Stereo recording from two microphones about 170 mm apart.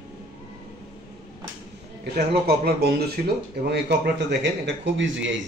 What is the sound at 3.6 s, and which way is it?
A man's voice, 85° right.